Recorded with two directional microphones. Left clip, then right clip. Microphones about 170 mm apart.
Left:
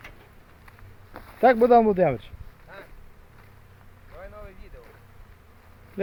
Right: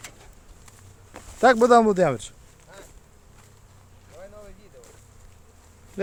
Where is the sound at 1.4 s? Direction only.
15° right (ahead or behind).